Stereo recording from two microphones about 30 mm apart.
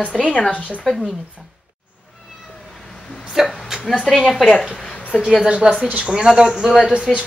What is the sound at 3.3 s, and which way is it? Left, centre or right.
Speech, centre.